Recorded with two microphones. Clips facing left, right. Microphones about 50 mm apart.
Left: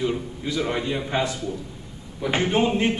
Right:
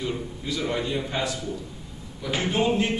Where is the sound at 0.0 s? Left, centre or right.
Centre.